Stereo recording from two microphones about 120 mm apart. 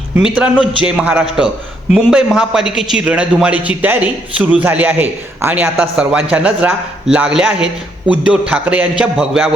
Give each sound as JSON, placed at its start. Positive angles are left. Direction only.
{"t": 0.2, "sound": "a man's voice", "side_deg": -5}